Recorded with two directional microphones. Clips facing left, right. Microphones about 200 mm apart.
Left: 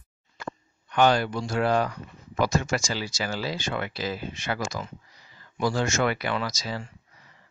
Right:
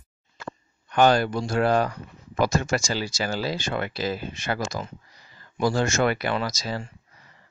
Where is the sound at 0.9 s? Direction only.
45° right (ahead or behind).